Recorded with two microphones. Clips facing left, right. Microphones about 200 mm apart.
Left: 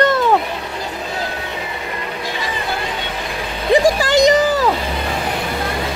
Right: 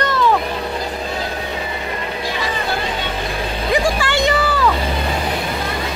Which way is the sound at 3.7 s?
40° left (ahead or behind).